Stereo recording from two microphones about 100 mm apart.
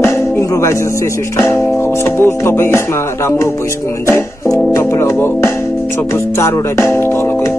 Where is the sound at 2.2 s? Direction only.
25° left (ahead or behind).